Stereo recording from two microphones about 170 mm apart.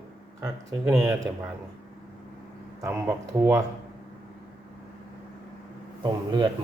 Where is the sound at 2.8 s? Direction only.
15° right (ahead or behind).